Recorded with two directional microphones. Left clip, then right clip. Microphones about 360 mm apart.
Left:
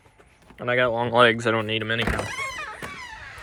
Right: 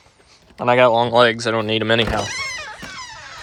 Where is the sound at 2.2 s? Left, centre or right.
Right.